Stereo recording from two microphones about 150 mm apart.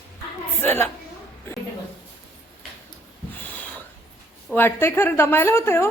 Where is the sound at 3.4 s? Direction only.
10° left (ahead or behind).